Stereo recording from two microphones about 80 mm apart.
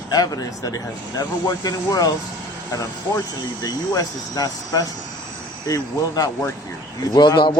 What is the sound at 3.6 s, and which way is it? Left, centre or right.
Speech, left.